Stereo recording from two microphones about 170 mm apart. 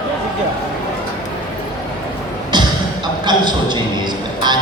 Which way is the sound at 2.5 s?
25° right (ahead or behind).